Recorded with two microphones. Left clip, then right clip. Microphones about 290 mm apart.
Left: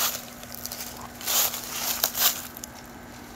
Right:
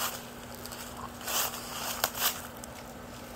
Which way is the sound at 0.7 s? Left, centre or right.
Left.